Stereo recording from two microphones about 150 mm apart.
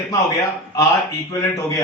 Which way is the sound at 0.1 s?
20° left (ahead or behind).